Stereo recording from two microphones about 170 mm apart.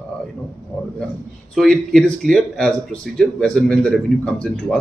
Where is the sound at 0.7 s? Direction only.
10° left (ahead or behind).